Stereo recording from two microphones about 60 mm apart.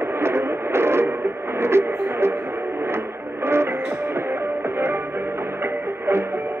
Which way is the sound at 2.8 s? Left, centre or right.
Right.